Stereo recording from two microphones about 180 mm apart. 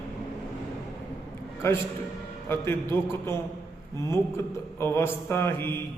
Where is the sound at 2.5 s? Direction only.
15° left (ahead or behind).